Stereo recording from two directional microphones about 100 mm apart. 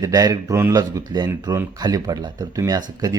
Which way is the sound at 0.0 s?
35° right (ahead or behind).